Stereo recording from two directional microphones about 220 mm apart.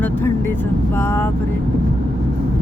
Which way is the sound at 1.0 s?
10° left (ahead or behind).